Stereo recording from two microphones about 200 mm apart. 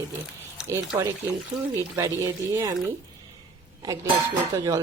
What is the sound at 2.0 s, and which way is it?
Speech, 15° right (ahead or behind).